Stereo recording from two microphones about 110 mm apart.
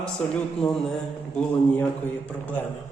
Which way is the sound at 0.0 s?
5° left (ahead or behind).